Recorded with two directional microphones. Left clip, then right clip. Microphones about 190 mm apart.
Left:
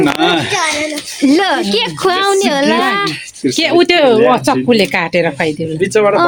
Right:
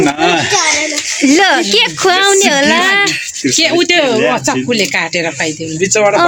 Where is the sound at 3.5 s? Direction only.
65° left (ahead or behind).